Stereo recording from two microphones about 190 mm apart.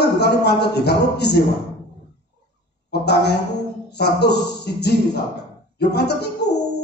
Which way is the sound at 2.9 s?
60° left (ahead or behind).